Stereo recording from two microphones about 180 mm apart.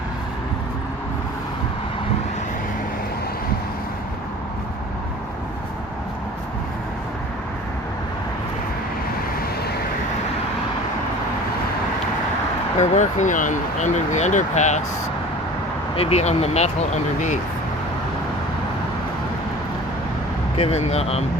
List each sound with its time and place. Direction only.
12.8 s speech: 40° left (ahead or behind)
16.0 s speech: 35° left (ahead or behind)
20.6 s speech: 35° left (ahead or behind)